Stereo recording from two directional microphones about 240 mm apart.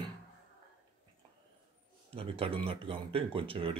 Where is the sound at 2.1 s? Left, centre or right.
Right.